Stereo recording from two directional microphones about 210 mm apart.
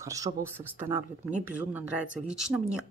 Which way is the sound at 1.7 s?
5° right (ahead or behind).